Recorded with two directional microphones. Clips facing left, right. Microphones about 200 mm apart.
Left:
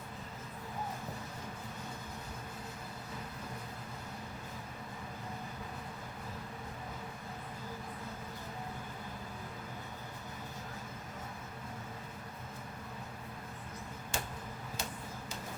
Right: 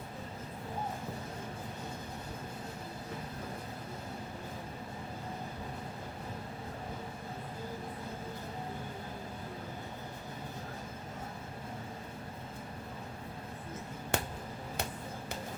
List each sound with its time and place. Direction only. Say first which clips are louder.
14.1 s finger snapping: right 6 dB; 60° right (ahead or behind)